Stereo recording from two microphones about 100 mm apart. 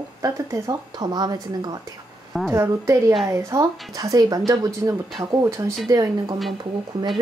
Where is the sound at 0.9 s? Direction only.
45° right (ahead or behind).